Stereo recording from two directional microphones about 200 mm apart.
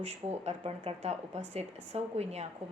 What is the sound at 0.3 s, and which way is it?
Speech, 30° right (ahead or behind).